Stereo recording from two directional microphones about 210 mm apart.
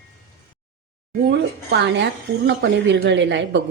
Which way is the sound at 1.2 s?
55° right (ahead or behind).